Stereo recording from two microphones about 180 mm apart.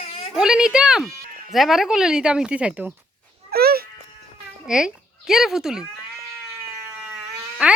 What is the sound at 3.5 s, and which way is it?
Speech, 60° right (ahead or behind).